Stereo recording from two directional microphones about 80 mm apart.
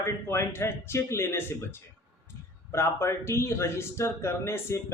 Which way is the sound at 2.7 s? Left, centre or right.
Left.